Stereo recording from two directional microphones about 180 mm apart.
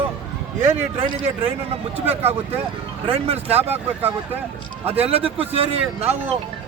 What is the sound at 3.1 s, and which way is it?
Speech, 35° right (ahead or behind).